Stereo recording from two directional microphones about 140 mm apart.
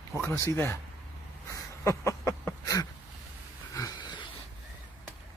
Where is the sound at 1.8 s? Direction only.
20° left (ahead or behind).